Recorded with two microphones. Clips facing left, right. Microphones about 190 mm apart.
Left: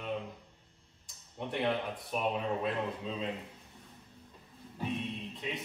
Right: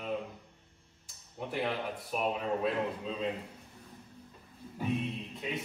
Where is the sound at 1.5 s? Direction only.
Centre (ahead or behind).